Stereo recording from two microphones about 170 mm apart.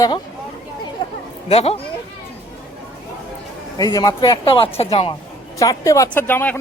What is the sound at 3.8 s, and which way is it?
A man's voice, 20° left (ahead or behind).